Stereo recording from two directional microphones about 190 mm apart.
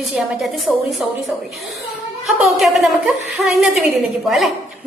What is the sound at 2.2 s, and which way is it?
A woman's voice, centre (ahead or behind).